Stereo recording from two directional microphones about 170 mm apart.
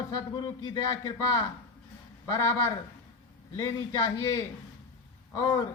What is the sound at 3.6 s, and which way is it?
A man's voice, 20° left (ahead or behind).